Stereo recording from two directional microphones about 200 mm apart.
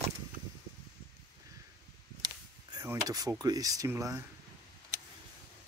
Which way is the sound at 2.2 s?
20° right (ahead or behind).